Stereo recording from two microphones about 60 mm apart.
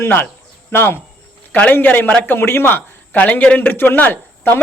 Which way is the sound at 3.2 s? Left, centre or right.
Left.